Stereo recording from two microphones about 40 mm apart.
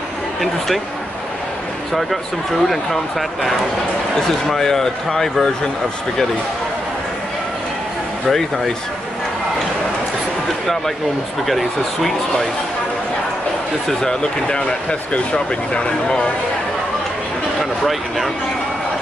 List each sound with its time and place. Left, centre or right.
2.0 s a man's voice: centre
8.3 s a man's voice: centre
11.4 s speech: centre
13.8 s speech: centre
17.6 s speech: centre